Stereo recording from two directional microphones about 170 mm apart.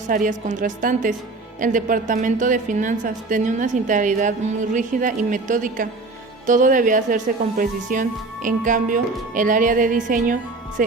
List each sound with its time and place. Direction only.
0.1 s a woman's voice: 50° right (ahead or behind)